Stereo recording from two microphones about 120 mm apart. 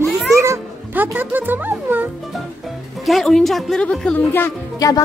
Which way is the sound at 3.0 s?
Centre (ahead or behind).